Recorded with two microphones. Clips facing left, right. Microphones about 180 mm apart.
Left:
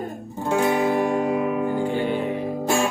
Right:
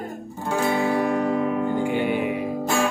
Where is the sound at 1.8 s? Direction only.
15° right (ahead or behind).